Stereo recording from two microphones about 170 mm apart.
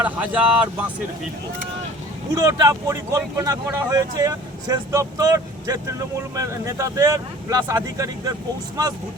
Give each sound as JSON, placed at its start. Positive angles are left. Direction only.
{"t": 0.0, "sound": "speech", "side_deg": -10}
{"t": 2.3, "sound": "speech", "side_deg": -20}